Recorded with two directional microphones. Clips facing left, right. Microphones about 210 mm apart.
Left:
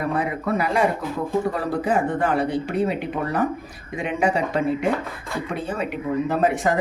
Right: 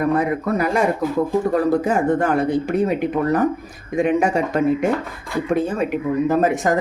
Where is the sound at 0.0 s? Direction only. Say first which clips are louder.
Right 5 dB; 45° right (ahead or behind).